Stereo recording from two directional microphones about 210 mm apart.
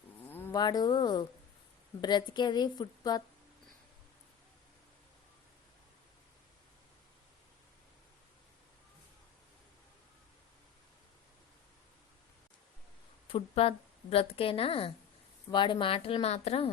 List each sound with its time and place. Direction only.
0.3 s a woman's voice: 10° left (ahead or behind)
13.3 s a woman's voice: 25° left (ahead or behind)